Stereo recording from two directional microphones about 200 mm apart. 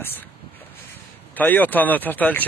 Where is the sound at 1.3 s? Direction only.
10° left (ahead or behind).